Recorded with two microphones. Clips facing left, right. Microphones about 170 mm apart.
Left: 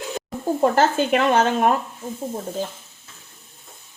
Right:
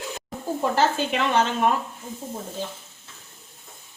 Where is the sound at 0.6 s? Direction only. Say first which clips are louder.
Left 4 dB; 50° left (ahead or behind).